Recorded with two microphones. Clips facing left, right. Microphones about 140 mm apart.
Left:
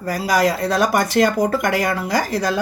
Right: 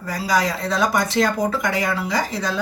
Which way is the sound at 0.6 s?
60° left (ahead or behind).